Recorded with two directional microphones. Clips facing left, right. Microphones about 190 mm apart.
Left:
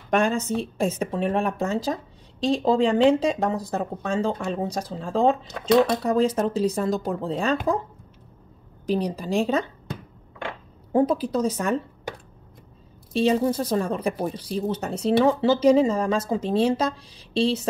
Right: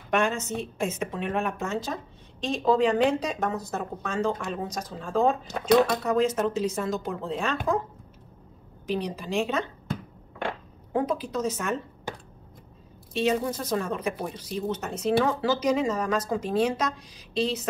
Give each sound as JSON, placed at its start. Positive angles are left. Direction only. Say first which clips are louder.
{"t": 0.1, "sound": "speech", "louder": "left 4 dB", "side_deg": 35}
{"t": 8.8, "sound": "speech", "louder": "left 5 dB", "side_deg": 35}
{"t": 10.9, "sound": "speech", "louder": "left 6 dB", "side_deg": 30}
{"t": 13.1, "sound": "speech", "louder": "left 5 dB", "side_deg": 35}